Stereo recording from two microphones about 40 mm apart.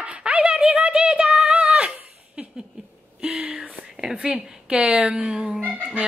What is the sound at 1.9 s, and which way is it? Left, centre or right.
Laughter, right.